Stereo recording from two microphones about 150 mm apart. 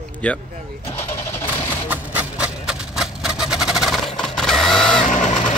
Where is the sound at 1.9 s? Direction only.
10° right (ahead or behind).